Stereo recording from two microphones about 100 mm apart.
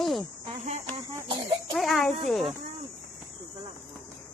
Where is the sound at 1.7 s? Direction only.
Centre (ahead or behind).